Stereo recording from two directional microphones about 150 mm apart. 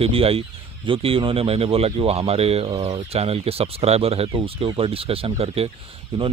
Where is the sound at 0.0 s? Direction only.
40° right (ahead or behind).